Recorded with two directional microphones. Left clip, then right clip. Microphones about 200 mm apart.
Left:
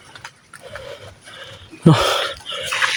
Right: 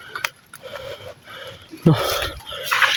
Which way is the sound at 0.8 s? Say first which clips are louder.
Right 1 dB; centre (ahead or behind).